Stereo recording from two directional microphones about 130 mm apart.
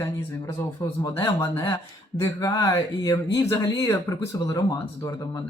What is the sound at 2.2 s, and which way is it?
Speech, 25° left (ahead or behind).